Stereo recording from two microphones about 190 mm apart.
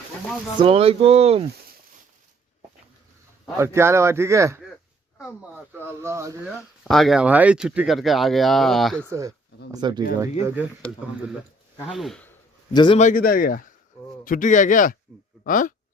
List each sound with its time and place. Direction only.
0.6 s speech: 30° right (ahead or behind)
3.6 s speech: 15° right (ahead or behind)
6.8 s speech: centre (ahead or behind)
9.0 s speech: 15° right (ahead or behind)
10.4 s speech: 10° right (ahead or behind)
11.9 s speech: centre (ahead or behind)
12.7 s a man's voice: 25° left (ahead or behind)
13.0 s speech: 45° left (ahead or behind)